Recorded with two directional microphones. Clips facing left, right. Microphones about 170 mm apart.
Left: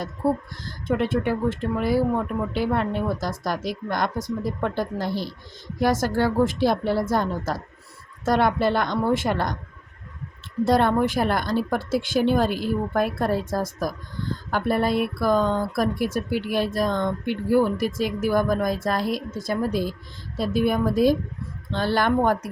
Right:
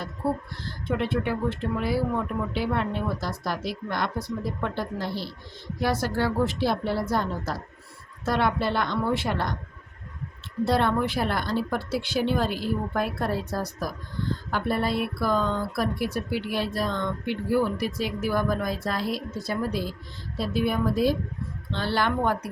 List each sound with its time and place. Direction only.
0.2 s speech: 40° left (ahead or behind)
10.7 s speech: 45° left (ahead or behind)
20.3 s speech: 45° left (ahead or behind)